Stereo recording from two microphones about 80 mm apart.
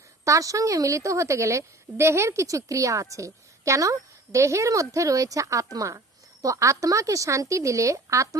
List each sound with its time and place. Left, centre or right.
0.3 s a woman's voice: right